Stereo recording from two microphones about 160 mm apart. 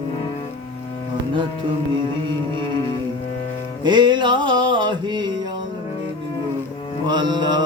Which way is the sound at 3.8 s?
30° right (ahead or behind).